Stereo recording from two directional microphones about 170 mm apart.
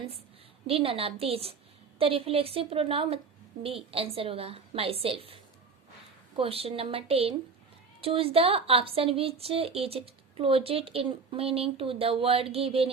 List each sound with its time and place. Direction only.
0.7 s a woman's voice: 35° right (ahead or behind)